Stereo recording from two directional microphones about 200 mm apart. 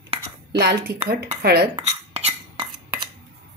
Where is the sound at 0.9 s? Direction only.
50° right (ahead or behind).